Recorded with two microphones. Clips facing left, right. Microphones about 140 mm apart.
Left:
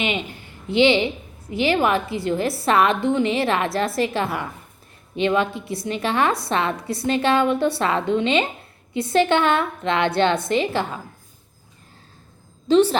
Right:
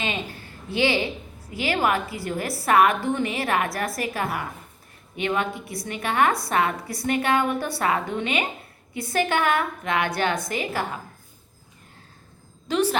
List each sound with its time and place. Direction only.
0.0 s a woman's voice: 20° left (ahead or behind)
12.6 s a woman's voice: 30° left (ahead or behind)